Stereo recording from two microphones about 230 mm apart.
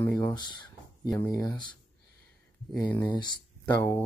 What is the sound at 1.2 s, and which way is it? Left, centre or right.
Speech, centre.